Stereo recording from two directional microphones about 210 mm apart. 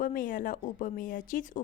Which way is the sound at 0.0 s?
40° left (ahead or behind).